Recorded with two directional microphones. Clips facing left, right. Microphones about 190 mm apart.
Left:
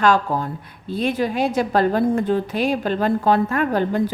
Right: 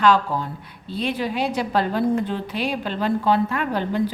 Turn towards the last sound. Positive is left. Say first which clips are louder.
# left 4 dB
turn(degrees=45)  # may be behind; listen again after turning